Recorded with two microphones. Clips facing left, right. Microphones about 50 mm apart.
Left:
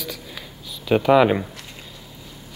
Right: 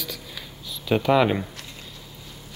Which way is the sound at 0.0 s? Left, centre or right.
Left.